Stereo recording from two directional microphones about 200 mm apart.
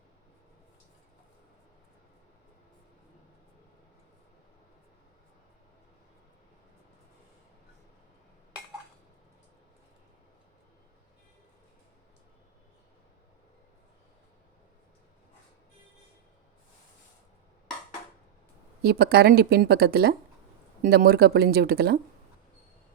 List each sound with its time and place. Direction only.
18.8 s speech: 50° right (ahead or behind)